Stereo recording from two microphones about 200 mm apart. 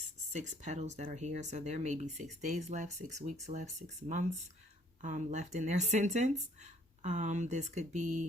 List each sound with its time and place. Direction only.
0.3 s speech: 35° right (ahead or behind)